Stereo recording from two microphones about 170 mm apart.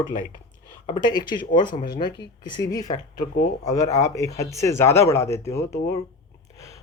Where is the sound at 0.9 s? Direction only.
25° left (ahead or behind).